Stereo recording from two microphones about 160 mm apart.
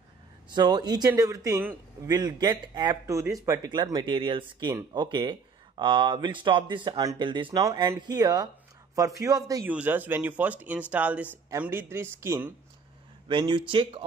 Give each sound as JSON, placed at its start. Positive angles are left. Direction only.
{"t": 0.6, "sound": "speech", "side_deg": -25}
{"t": 9.7, "sound": "speech", "side_deg": -10}
{"t": 13.3, "sound": "speech", "side_deg": -30}